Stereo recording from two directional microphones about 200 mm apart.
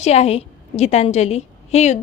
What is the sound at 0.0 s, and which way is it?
A woman's voice, 30° left (ahead or behind).